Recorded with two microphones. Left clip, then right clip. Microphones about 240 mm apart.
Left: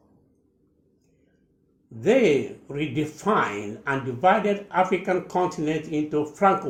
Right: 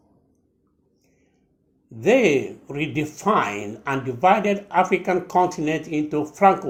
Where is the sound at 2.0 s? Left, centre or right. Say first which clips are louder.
Right 2 dB; right.